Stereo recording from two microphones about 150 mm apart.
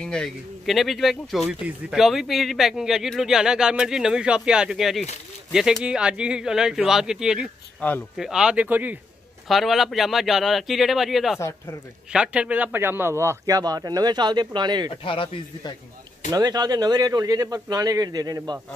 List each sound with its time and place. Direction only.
0.0 s speech: 5° left (ahead or behind)
7.8 s speech: 10° left (ahead or behind)
8.2 s speech: 5° right (ahead or behind)
9.5 s speech: centre (ahead or behind)
11.3 s speech: 20° left (ahead or behind)
12.1 s a man's voice: 5° right (ahead or behind); by 14.9 s 30° right (ahead or behind)
15.0 s speech: 35° left (ahead or behind)
16.3 s a man's voice: 25° right (ahead or behind)